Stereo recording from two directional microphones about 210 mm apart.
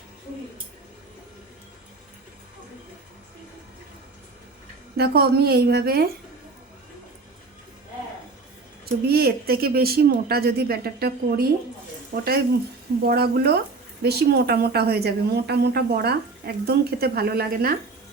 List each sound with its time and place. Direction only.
4.9 s a woman's voice: 45° right (ahead or behind)
9.0 s a woman's voice: 45° right (ahead or behind)